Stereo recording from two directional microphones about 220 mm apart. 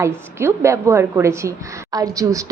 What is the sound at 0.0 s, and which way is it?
A woman's voice, 10° right (ahead or behind).